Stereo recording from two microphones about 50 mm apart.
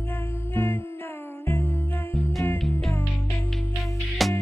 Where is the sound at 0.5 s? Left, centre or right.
Left.